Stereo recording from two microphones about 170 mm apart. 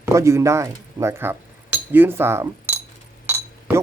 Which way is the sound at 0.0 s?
15° right (ahead or behind).